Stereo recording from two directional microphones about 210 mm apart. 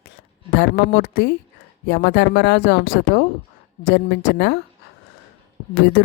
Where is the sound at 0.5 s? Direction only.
55° left (ahead or behind).